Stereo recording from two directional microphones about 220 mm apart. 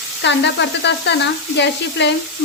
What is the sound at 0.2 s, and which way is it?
Frying, 50° left (ahead or behind).